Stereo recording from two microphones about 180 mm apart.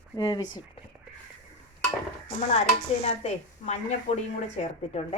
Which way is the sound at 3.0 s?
40° left (ahead or behind).